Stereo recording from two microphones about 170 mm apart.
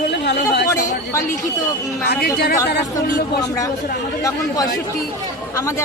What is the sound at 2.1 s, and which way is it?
Speech, 70° left (ahead or behind).